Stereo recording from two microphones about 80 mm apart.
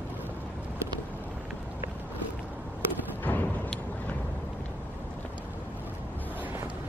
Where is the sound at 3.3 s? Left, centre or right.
Centre.